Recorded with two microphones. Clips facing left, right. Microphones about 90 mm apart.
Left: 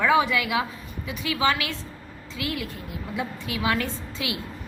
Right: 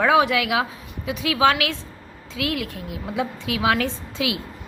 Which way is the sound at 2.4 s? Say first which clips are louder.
Right 5 dB; 90° right.